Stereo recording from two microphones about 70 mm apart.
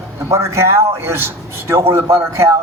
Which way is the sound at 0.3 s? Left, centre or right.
Right.